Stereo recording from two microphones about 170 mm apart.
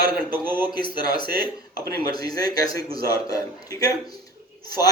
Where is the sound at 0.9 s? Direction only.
65° right (ahead or behind).